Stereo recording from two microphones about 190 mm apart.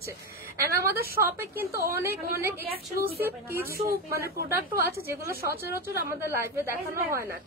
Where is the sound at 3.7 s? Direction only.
50° right (ahead or behind).